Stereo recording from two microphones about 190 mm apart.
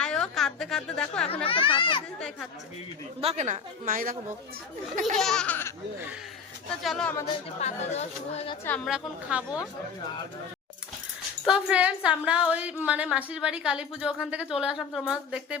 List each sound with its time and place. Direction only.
0.0 s a woman's voice: 5° left (ahead or behind)
1.5 s a child's voice: 25° left (ahead or behind)
3.2 s a woman's voice: 35° right (ahead or behind)
5.1 s a woman's voice: centre (ahead or behind)
6.8 s a woman's voice: 5° left (ahead or behind)
7.6 s speech: 35° left (ahead or behind)
8.6 s a woman's voice: 5° left (ahead or behind)
8.9 s a woman's voice: 5° right (ahead or behind)
11.4 s a woman's voice: 5° right (ahead or behind)